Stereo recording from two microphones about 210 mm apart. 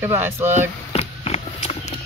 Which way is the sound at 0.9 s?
30° left (ahead or behind).